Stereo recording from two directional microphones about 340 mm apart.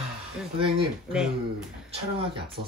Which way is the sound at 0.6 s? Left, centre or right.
Centre.